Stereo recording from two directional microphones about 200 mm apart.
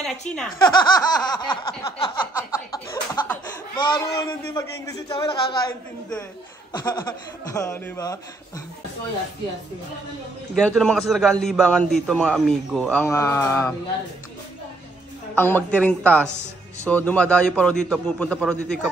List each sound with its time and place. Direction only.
0.6 s a man's voice: 20° left (ahead or behind)
2.5 s a sound: 15° left (ahead or behind)
3.7 s a man's voice: 20° left (ahead or behind)
6.7 s speech: 20° left (ahead or behind)
10.5 s a man's voice: centre (ahead or behind)
15.3 s a man's voice: 10° left (ahead or behind)